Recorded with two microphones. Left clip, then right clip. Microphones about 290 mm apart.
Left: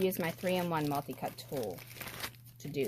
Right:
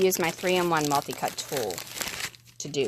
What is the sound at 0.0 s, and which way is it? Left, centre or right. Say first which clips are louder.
Speech: right 9 dB; right.